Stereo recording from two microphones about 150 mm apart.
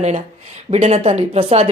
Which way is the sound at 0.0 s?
45° right (ahead or behind).